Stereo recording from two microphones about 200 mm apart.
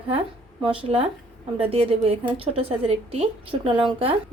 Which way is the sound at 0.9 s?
30° right (ahead or behind).